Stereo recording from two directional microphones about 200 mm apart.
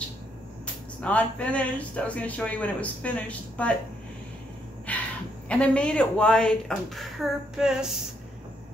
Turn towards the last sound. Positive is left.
turn(degrees=0)  # may be behind; listen again after turning